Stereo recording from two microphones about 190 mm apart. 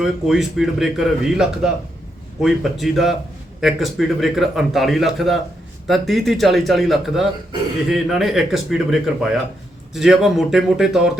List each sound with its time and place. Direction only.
0.0 s a man's voice: centre (ahead or behind)